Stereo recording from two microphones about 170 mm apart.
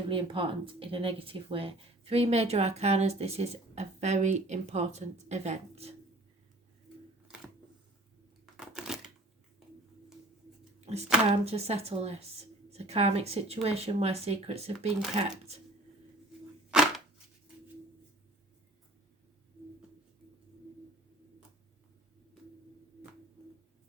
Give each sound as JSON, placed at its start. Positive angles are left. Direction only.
{"t": 0.1, "sound": "speech", "side_deg": -30}
{"t": 8.5, "sound": "crushing", "side_deg": -5}
{"t": 10.9, "sound": "speech", "side_deg": -40}
{"t": 16.7, "sound": "a sound", "side_deg": -5}